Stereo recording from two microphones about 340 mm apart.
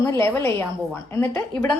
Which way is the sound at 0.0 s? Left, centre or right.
Centre.